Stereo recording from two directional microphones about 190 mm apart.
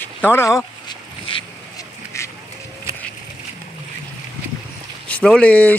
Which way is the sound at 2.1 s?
15° left (ahead or behind).